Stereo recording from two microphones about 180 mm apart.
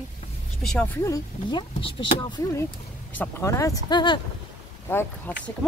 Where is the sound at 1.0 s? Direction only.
20° left (ahead or behind).